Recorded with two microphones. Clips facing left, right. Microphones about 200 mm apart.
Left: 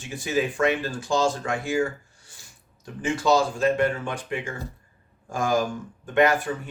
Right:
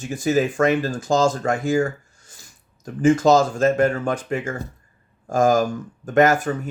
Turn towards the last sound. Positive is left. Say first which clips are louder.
# right 4 dB
turn(degrees=-45)  # may be behind; listen again after turning